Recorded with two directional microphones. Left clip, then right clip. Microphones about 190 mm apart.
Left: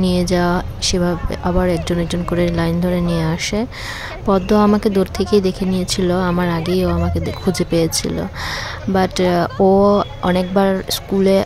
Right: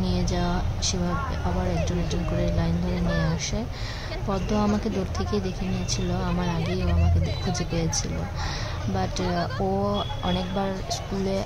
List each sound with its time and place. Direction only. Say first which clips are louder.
0.0 s speech: left 11 dB; 45° left (ahead or behind)